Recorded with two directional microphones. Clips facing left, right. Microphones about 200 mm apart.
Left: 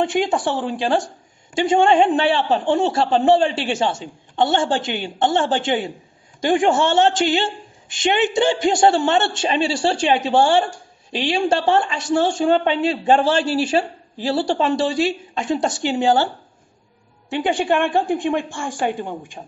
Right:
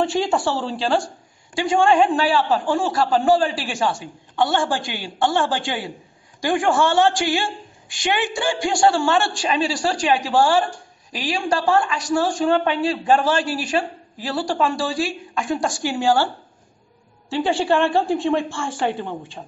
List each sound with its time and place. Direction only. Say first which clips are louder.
0.0 s a woman's voice: left 1 dB; 20° left (ahead or behind)
17.3 s a woman's voice: even; 20° left (ahead or behind)